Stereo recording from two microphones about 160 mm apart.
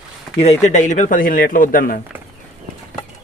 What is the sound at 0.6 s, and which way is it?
Speech, 50° left (ahead or behind).